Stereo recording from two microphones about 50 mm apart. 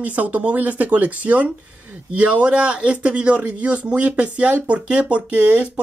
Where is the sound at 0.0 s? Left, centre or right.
Right.